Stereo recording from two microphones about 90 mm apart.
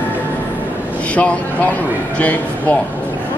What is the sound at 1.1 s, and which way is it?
Speech, 15° left (ahead or behind).